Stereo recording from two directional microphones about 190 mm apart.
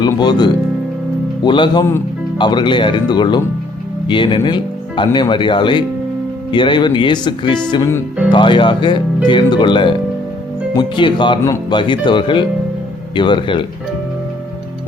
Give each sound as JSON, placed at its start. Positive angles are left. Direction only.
{"t": 0.1, "sound": "speech", "side_deg": 20}
{"t": 7.7, "sound": "music", "side_deg": 15}
{"t": 8.3, "sound": "speech", "side_deg": 25}